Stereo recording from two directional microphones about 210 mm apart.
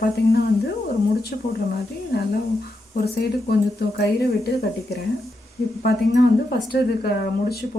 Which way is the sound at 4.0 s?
50° left (ahead or behind).